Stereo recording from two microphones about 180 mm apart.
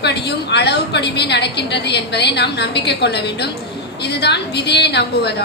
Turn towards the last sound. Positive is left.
turn(degrees=65)  # may be behind; listen again after turning